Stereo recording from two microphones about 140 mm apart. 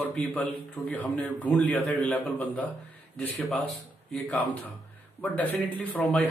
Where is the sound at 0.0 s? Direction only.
10° left (ahead or behind).